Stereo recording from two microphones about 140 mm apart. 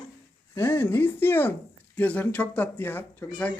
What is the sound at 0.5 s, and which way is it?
Speech, 15° left (ahead or behind).